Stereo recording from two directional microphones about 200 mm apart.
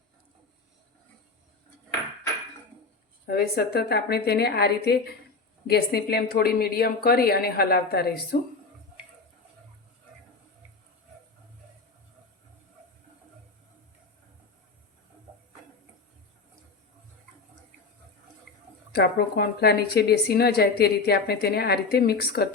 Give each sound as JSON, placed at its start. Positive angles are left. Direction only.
{"t": 3.2, "sound": "a woman's voice", "side_deg": 50}
{"t": 18.9, "sound": "a woman's voice", "side_deg": 55}